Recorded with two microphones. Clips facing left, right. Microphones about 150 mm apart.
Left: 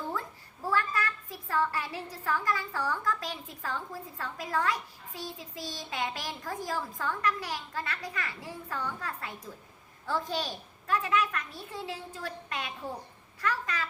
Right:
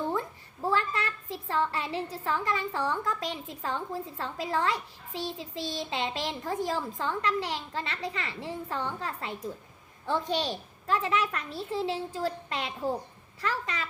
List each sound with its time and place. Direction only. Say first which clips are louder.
0.1 s a child's voice: right 5 dB; 25° right (ahead or behind)